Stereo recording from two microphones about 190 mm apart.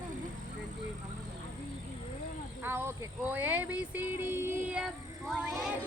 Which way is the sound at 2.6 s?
10° right (ahead or behind).